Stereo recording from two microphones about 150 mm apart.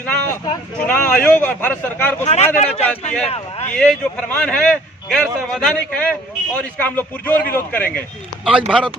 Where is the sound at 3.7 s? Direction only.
5° left (ahead or behind).